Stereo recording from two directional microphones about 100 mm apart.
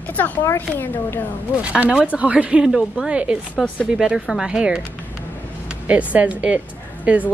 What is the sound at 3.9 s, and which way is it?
Speech, 5° right (ahead or behind).